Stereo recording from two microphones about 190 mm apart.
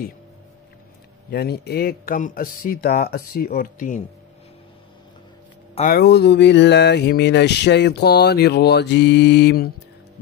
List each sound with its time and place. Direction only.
1.3 s speech: 55° left (ahead or behind)
5.9 s mantra: 60° left (ahead or behind)